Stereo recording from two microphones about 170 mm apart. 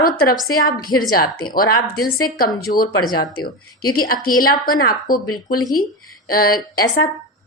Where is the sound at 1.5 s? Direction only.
60° left (ahead or behind).